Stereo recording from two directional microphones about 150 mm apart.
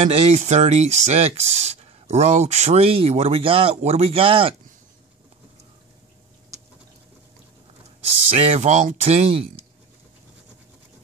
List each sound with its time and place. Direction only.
0.0 s speech: 45° right (ahead or behind)
8.4 s speech: 45° right (ahead or behind)